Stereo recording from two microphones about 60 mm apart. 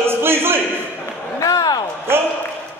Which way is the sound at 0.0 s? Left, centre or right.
Right.